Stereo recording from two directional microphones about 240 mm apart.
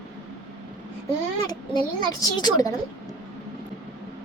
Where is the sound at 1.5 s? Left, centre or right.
Centre.